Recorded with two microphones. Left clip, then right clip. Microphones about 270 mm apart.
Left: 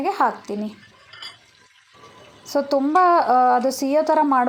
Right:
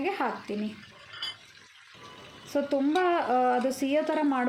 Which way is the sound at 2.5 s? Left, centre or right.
Centre.